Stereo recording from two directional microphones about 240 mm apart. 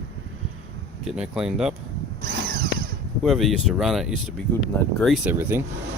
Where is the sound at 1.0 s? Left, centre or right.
Centre.